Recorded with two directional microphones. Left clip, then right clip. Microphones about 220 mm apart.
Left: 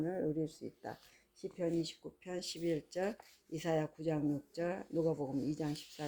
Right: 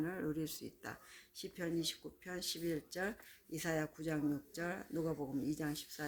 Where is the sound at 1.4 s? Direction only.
10° right (ahead or behind).